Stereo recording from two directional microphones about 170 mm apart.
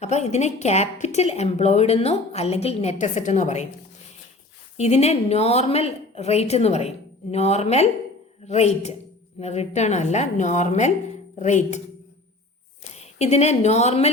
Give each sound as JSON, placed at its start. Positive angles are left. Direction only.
{"t": 0.0, "sound": "a woman's voice", "side_deg": 40}
{"t": 4.8, "sound": "a woman's voice", "side_deg": 40}
{"t": 13.0, "sound": "a woman's voice", "side_deg": 40}